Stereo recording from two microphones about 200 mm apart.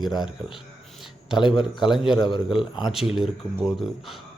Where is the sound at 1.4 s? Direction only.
25° left (ahead or behind).